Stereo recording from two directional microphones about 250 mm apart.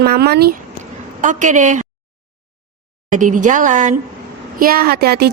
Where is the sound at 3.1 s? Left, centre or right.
Right.